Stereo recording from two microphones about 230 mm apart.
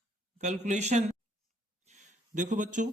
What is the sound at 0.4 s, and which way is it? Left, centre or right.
Speech, right.